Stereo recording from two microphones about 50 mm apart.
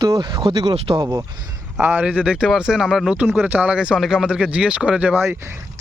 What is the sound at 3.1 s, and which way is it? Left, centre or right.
Speech, right.